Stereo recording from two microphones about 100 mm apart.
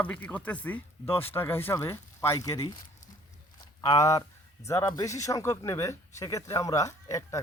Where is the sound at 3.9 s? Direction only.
35° left (ahead or behind).